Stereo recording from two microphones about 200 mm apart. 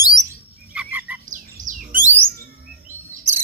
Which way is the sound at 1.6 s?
40° right (ahead or behind).